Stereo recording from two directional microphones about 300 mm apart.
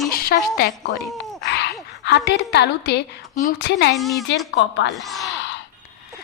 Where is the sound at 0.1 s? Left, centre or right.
Left.